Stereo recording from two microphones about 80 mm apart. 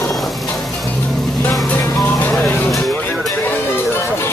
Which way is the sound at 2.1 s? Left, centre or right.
Left.